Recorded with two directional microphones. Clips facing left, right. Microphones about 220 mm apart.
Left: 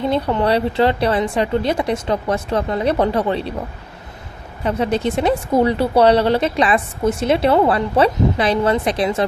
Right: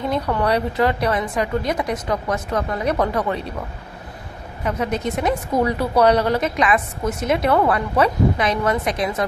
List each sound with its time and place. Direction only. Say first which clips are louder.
0.1 s speech: left 2 dB; 25° left (ahead or behind)
4.6 s speech: left 4 dB; 30° left (ahead or behind)